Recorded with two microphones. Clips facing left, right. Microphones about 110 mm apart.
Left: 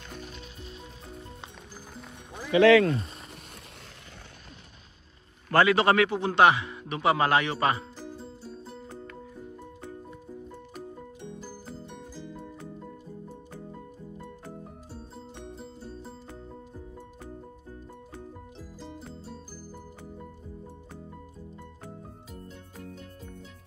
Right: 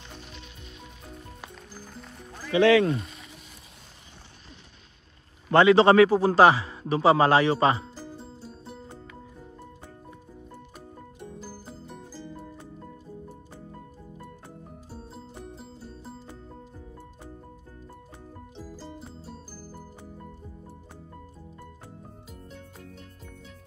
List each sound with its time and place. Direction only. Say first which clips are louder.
1.7 s music: right 1 dB; centre (ahead or behind)
2.5 s speech: left 1 dB; 30° right (ahead or behind)
5.5 s a man's voice: right 5 dB; 25° right (ahead or behind)
12.1 s music: even; 5° right (ahead or behind)
15.3 s music: even; 5° right (ahead or behind)
18.6 s music: right 3 dB; centre (ahead or behind)